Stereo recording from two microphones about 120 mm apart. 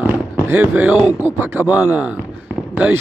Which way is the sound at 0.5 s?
15° right (ahead or behind).